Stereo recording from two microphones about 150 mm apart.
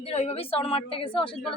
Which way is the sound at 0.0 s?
45° left (ahead or behind).